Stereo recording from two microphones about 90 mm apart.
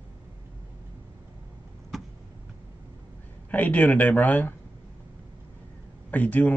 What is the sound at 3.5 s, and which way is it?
Speech, 15° left (ahead or behind).